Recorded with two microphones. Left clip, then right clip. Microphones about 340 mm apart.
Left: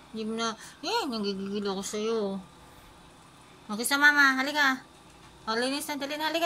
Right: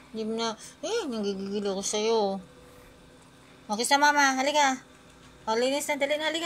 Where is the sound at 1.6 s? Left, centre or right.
Centre.